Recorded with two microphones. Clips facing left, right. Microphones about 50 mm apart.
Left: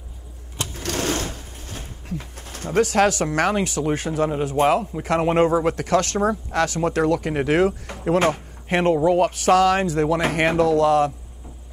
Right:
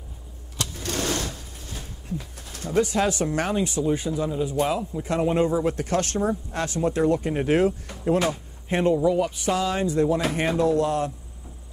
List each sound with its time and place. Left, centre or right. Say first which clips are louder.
0.6 s sewing machine: left 3 dB; left
2.0 s pigeon: left 1 dB; left
2.8 s speech: left 5 dB; left
4.6 s a man's voice: left 6 dB; left
5.2 s speech: left 3 dB; left
10.3 s speech: left 4 dB; left
10.7 s speech: left 6 dB; left